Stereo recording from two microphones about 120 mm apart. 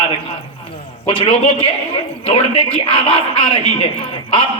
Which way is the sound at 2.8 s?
50° left (ahead or behind).